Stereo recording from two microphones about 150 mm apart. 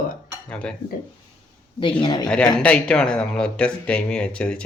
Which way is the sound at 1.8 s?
30° left (ahead or behind).